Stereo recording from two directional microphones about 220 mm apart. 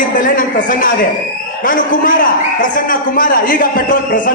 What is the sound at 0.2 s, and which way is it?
A man's voice, 35° left (ahead or behind).